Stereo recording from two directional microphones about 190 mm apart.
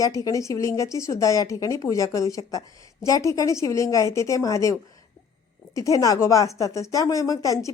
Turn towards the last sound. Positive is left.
turn(degrees=15)  # may be behind; listen again after turning